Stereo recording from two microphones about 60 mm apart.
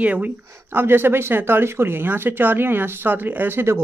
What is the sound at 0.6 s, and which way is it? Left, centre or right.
Speech, right.